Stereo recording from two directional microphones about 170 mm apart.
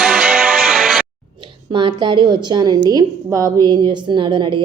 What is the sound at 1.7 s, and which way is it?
A woman's voice, 25° right (ahead or behind).